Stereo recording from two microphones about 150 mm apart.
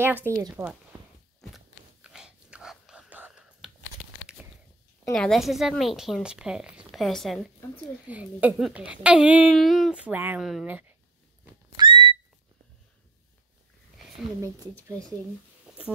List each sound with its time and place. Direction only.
0.0 s a woman's voice: 15° right (ahead or behind)
1.4 s a sound: centre (ahead or behind)
5.1 s a woman's voice: 5° left (ahead or behind)
8.1 s a woman's voice: 10° right (ahead or behind)
10.1 s a woman's voice: 15° right (ahead or behind)
11.7 s whistle: 30° right (ahead or behind)
15.7 s a sound: 5° right (ahead or behind)